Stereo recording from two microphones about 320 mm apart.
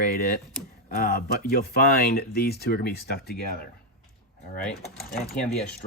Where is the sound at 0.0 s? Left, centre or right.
Left.